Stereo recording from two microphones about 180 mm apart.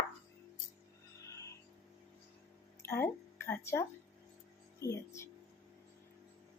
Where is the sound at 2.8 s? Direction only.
15° left (ahead or behind).